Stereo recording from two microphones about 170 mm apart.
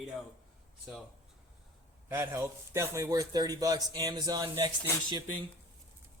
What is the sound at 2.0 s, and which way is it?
A man's voice, 15° right (ahead or behind).